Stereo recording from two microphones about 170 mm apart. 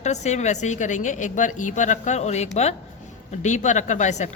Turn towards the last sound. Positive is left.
turn(degrees=45)  # may be behind; listen again after turning